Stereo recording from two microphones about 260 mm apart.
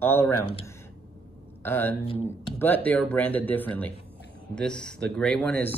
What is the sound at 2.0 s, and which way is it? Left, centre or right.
Speech, left.